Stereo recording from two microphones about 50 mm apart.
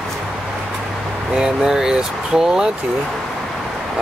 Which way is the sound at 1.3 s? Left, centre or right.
Centre.